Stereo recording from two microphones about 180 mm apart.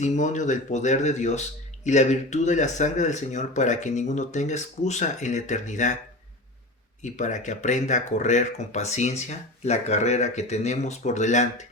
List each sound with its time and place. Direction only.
0.0 s speech: 40° left (ahead or behind)
7.0 s speech: 45° left (ahead or behind)